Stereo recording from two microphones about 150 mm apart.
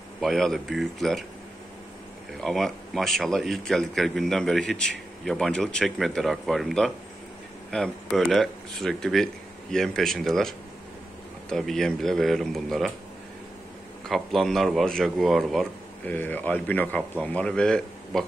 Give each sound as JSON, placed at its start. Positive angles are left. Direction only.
{"t": 0.2, "sound": "speech", "side_deg": 0}
{"t": 2.4, "sound": "speech", "side_deg": 0}
{"t": 14.0, "sound": "speech", "side_deg": 0}
{"t": 16.1, "sound": "speech", "side_deg": 10}